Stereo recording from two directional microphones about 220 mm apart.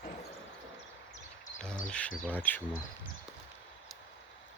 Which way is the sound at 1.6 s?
5° left (ahead or behind).